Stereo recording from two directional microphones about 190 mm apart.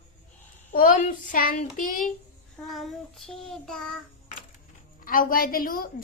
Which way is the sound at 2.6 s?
Centre (ahead or behind).